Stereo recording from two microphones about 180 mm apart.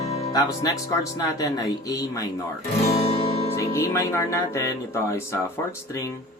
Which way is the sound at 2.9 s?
35° left (ahead or behind).